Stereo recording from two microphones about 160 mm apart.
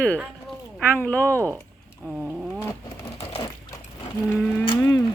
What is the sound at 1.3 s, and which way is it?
Speech, 20° right (ahead or behind).